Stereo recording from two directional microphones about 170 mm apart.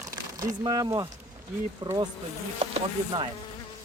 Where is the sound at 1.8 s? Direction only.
25° right (ahead or behind).